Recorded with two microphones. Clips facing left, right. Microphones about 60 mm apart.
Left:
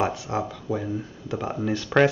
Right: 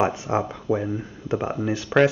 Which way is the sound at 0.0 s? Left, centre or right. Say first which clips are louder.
Right 3 dB; right.